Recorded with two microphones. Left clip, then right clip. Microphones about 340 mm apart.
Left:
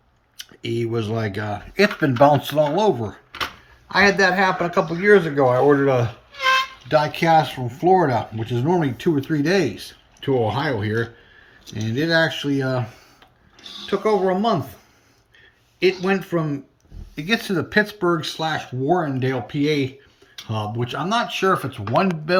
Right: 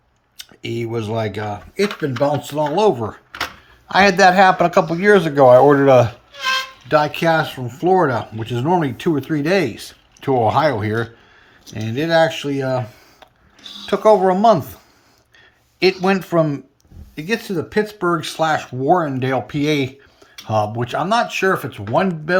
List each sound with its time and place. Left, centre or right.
0.3 s speech: centre
2.0 s speech: centre
3.8 s speech: centre
6.8 s speech: centre
13.7 s speech: centre
15.8 s speech: centre
17.2 s speech: centre